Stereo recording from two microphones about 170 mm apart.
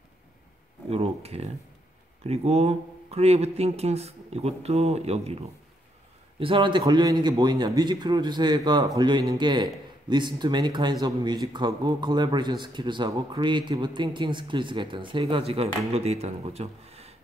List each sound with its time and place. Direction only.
0.8 s speech: 35° right (ahead or behind)